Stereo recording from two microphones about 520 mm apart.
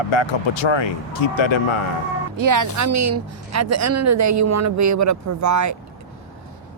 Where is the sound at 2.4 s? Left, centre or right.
Right.